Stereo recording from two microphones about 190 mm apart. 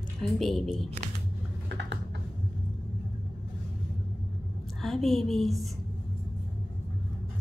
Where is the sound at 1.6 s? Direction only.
65° right (ahead or behind).